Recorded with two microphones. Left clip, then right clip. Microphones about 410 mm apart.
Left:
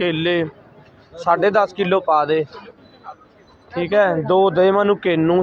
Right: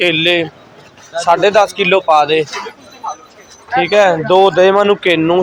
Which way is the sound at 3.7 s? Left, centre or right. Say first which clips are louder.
Right 6 dB; left.